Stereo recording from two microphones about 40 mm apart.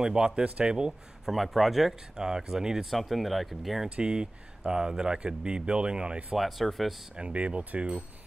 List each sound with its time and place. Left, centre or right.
0.0 s speech: centre
1.2 s speech: centre
2.1 s speech: centre
2.9 s speech: centre
3.9 s speech: right
6.3 s speech: centre
7.2 s speech: right